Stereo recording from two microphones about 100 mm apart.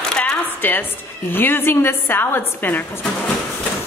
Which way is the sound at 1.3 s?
20° left (ahead or behind).